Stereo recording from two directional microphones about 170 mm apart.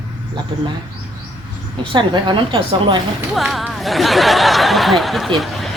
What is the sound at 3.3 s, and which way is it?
Speech, centre (ahead or behind).